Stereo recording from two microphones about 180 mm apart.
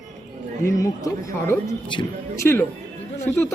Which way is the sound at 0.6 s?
20° left (ahead or behind).